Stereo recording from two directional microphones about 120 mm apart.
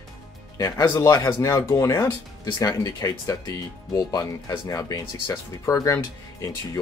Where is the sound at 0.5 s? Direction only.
30° left (ahead or behind).